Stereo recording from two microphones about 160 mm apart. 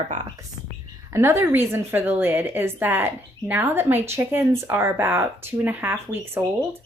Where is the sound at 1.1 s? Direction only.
15° right (ahead or behind).